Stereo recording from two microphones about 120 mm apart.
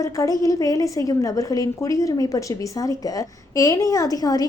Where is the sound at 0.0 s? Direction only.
25° left (ahead or behind).